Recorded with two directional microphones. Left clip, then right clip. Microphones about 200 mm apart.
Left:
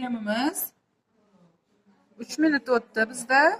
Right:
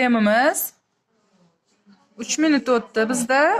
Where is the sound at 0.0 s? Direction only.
35° right (ahead or behind).